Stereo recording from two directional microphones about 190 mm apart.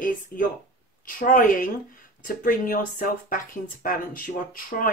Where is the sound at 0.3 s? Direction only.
50° left (ahead or behind).